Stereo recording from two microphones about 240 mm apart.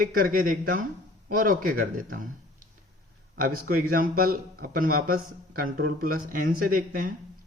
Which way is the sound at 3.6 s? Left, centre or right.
Right.